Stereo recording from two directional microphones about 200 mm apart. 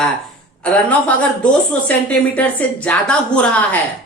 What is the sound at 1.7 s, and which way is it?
A woman's voice, 5° left (ahead or behind).